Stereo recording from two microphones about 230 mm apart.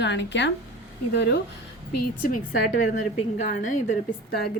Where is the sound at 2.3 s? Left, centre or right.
Left.